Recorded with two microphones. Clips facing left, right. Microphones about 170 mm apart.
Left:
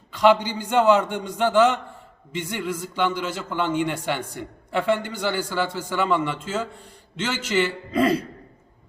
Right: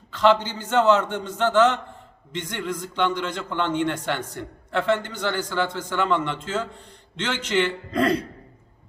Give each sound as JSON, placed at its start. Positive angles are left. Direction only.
{"t": 0.1, "sound": "a man's voice", "side_deg": 10}